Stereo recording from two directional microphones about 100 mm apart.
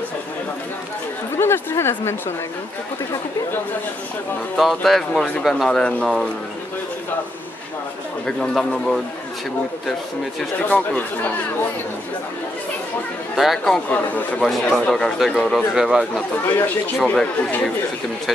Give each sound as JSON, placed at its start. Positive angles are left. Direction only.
{"t": 1.3, "sound": "a woman's voice", "side_deg": 25}
{"t": 4.6, "sound": "speech", "side_deg": 0}
{"t": 8.3, "sound": "speech", "side_deg": 5}
{"t": 10.6, "sound": "speech", "side_deg": 15}
{"t": 13.4, "sound": "speech", "side_deg": 0}
{"t": 17.0, "sound": "speech", "side_deg": 10}